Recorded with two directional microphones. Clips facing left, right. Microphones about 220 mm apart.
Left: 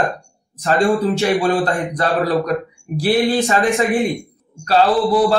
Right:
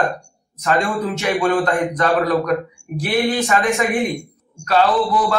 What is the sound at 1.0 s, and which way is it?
Speech, 30° left (ahead or behind).